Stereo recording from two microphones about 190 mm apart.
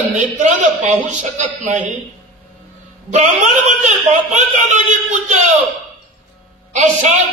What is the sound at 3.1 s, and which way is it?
A man's voice, 40° right (ahead or behind).